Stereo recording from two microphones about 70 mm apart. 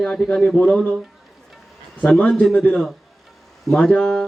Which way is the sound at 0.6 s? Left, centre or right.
Left.